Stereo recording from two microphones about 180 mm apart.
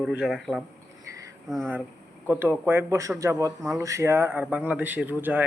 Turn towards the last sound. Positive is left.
turn(degrees=-10)  # may be behind; listen again after turning